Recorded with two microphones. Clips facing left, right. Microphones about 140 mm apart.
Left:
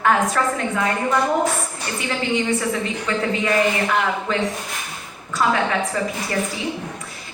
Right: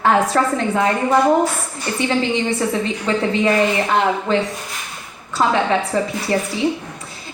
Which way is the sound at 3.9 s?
30° right (ahead or behind).